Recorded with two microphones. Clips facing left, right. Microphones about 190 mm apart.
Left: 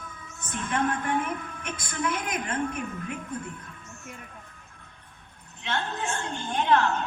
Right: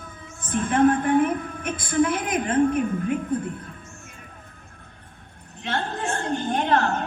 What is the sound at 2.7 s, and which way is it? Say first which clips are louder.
Speech: right 10 dB; 45° right (ahead or behind).